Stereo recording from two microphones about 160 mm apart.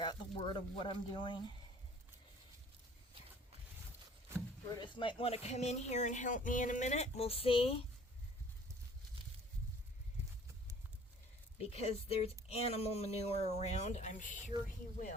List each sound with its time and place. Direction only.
0.0 s speech: 30° left (ahead or behind)
4.8 s speech: 30° left (ahead or behind)
11.5 s speech: 40° left (ahead or behind)